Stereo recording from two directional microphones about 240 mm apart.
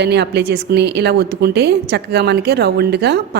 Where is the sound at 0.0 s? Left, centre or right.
Right.